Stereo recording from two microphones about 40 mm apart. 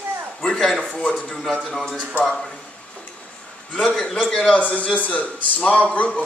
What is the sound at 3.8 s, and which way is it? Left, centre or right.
Speech, left.